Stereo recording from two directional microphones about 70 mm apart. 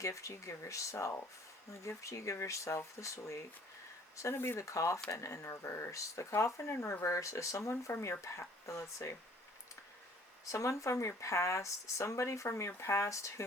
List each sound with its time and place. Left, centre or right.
0.0 s speech: left
10.4 s speech: left